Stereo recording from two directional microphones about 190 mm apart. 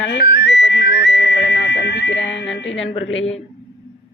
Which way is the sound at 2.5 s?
80° left.